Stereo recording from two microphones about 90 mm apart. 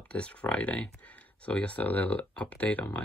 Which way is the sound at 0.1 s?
15° left (ahead or behind).